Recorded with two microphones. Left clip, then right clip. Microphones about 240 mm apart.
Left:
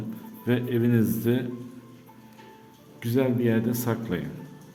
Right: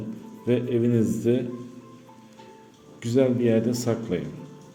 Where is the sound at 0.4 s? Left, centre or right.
Centre.